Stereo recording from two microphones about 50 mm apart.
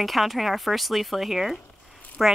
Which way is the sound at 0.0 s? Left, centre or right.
Centre.